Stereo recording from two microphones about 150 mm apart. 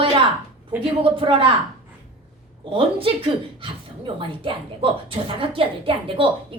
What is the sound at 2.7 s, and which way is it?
Speech, 35° right (ahead or behind).